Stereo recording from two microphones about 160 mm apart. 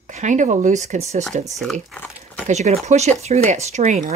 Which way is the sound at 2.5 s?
45° right (ahead or behind).